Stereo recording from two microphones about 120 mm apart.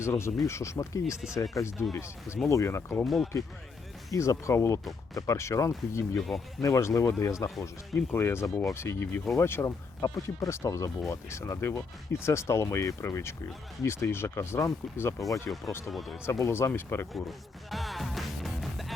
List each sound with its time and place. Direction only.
0.0 s speech: 20° left (ahead or behind)
6.1 s speech: centre (ahead or behind)
6.6 s speech: 25° left (ahead or behind)
15.9 s speech: centre (ahead or behind)
16.2 s speech: 25° left (ahead or behind)
17.1 s speech: centre (ahead or behind)